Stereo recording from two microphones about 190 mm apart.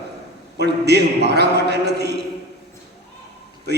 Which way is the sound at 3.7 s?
60° right (ahead or behind).